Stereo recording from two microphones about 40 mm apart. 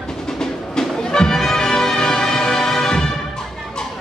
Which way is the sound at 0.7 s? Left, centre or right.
Centre.